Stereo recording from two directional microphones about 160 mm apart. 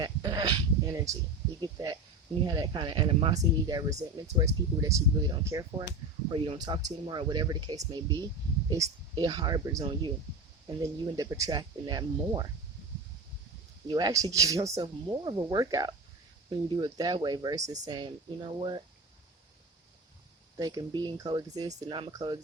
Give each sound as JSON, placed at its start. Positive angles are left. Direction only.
{"t": 0.0, "sound": "a sound", "side_deg": -25}
{"t": 1.6, "sound": "speech", "side_deg": -25}
{"t": 3.3, "sound": "speech", "side_deg": -20}
{"t": 6.3, "sound": "speech", "side_deg": -30}
{"t": 13.8, "sound": "speech", "side_deg": -25}
{"t": 20.6, "sound": "speech", "side_deg": -25}